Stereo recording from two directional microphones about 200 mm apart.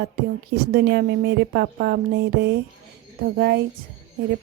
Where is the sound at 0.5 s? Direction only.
55° right (ahead or behind).